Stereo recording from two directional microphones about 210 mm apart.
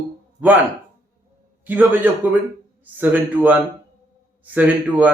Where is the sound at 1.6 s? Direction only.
10° right (ahead or behind).